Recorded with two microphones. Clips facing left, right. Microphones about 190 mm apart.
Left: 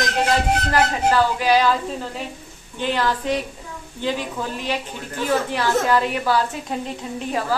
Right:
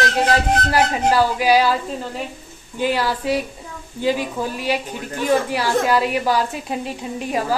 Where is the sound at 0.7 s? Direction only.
10° right (ahead or behind).